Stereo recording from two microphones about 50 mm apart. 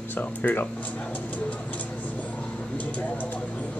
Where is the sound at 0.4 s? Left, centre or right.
Left.